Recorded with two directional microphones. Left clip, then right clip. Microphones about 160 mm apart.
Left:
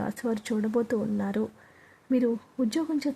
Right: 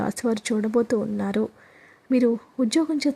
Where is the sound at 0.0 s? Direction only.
20° right (ahead or behind).